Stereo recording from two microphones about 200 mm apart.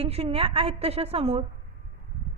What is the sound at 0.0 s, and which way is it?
A woman's voice, 30° right (ahead or behind).